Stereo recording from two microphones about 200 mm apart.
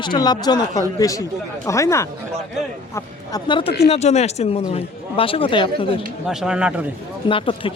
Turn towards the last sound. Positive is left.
turn(degrees=25)  # may be behind; listen again after turning